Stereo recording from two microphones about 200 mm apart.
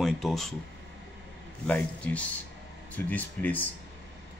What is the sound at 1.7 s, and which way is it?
Speech, 5° left (ahead or behind).